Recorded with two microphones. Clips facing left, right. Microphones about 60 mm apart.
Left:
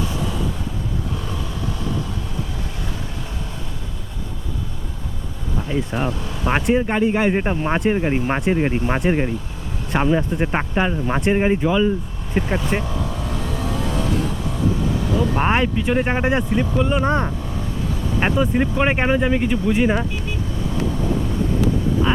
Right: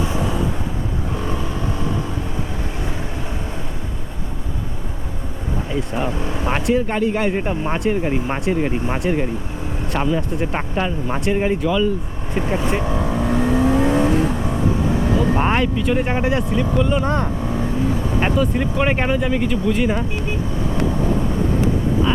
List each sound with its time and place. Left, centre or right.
0.0 s vehicle: right
6.1 s speech: right
6.5 s speech: centre
12.8 s vehicle: right
15.4 s speech: centre
17.4 s vehicle: right
18.3 s speech: centre